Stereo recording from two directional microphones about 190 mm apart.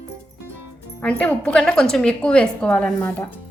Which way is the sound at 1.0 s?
5° left (ahead or behind).